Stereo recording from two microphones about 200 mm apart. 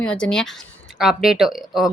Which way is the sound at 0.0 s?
5° left (ahead or behind).